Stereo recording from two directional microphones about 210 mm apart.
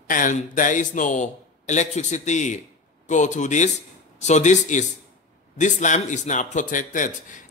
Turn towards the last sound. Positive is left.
turn(degrees=40)  # may be behind; listen again after turning